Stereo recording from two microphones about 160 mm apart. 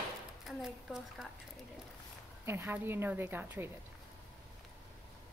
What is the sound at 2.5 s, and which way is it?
A woman's voice, 15° right (ahead or behind).